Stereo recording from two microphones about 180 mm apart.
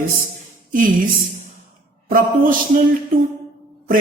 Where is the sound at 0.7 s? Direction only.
50° right (ahead or behind).